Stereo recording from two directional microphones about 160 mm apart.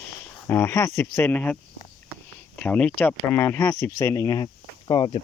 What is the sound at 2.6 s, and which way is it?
Speech, 10° left (ahead or behind).